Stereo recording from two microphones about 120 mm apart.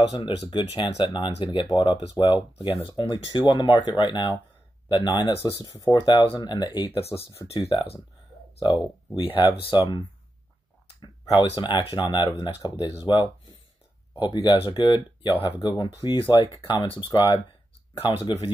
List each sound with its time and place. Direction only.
0.1 s speech: 40° left (ahead or behind)
2.9 s speech: 35° left (ahead or behind)
7.0 s speech: 55° left (ahead or behind)
9.1 s speech: 45° left (ahead or behind)